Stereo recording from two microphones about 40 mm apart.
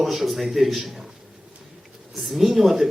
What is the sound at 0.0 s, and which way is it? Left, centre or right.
Speech, centre.